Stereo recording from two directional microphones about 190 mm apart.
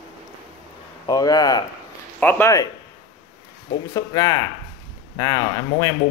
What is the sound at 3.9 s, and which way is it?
Speech, 20° left (ahead or behind).